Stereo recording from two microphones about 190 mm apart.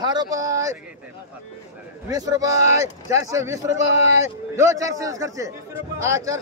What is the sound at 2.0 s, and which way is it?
Speech, 20° right (ahead or behind).